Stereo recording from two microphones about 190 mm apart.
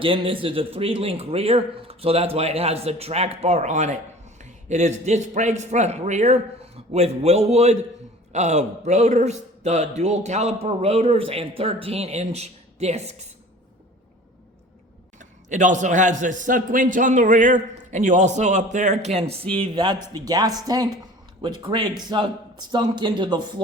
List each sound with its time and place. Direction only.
0.0 s a man's voice: 30° right (ahead or behind)
15.2 s a man's voice: 40° right (ahead or behind); by 23.5 s 25° right (ahead or behind)